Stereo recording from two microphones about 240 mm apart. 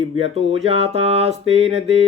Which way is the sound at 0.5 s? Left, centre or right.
Right.